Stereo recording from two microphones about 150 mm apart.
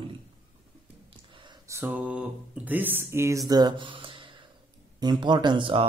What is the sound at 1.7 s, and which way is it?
Speech, 15° right (ahead or behind).